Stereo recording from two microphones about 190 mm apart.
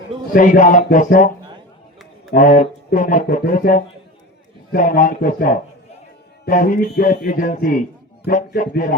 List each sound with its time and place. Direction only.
0.3 s speech: 45° left (ahead or behind)
2.3 s speech: 45° left (ahead or behind)